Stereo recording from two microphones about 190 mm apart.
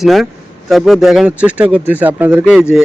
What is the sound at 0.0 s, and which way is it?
Speech, centre (ahead or behind).